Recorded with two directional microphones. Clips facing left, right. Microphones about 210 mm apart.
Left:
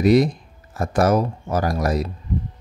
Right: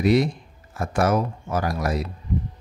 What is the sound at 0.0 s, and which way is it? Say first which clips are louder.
A man's voice: left 4 dB; 40° left (ahead or behind).